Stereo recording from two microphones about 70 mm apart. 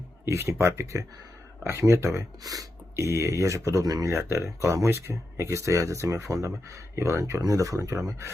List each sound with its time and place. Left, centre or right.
0.3 s speech: right
2.4 s speech: right
2.9 s speech: right
4.1 s speech: right